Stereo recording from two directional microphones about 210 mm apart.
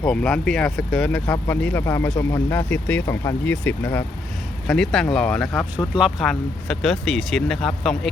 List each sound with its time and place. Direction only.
0.0 s speech: centre (ahead or behind)